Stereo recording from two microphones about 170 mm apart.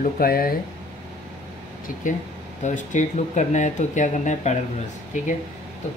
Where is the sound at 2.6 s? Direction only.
45° left (ahead or behind).